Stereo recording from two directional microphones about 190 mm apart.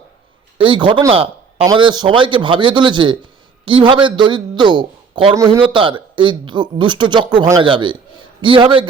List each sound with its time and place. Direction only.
0.6 s speech: 25° right (ahead or behind)
1.1 s a sound: 30° right (ahead or behind)
1.6 s speech: 25° right (ahead or behind)
7.6 s speech: 25° right (ahead or behind)